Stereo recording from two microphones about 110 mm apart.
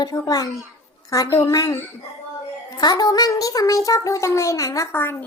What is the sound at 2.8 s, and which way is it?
A child's voice, 40° left (ahead or behind).